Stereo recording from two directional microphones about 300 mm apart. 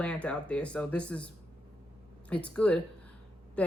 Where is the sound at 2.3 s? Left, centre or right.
Centre.